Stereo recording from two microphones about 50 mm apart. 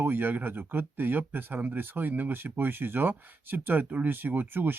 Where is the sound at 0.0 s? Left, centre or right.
Right.